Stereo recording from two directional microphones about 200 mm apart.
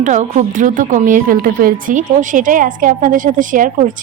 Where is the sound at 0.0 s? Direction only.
40° right (ahead or behind).